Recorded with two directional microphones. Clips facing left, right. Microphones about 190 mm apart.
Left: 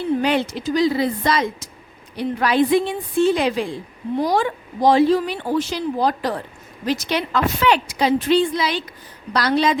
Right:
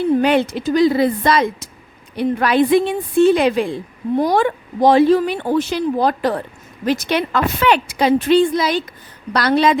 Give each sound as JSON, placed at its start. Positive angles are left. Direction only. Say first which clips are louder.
{"t": 0.2, "sound": "speech", "louder": "right 4 dB", "side_deg": -55}
{"t": 9.3, "sound": "speech", "louder": "right 3 dB", "side_deg": -60}